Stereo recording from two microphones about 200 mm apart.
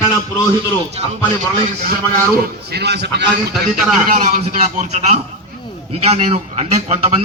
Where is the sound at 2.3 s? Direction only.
50° right (ahead or behind).